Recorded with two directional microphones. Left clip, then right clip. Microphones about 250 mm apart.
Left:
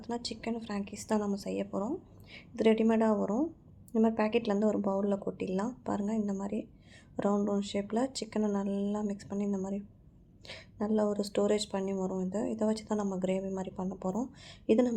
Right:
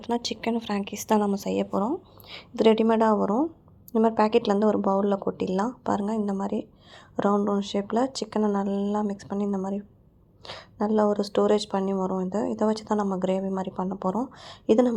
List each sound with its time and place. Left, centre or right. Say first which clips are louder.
0.0 s a woman's voice: right 9 dB; right